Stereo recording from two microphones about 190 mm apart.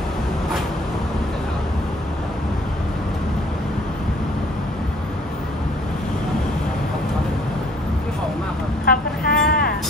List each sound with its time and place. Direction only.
8.8 s vehicle: 55° left (ahead or behind)